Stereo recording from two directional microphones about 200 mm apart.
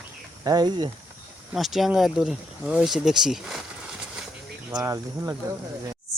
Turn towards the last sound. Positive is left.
turn(degrees=-15)  # may be behind; listen again after turning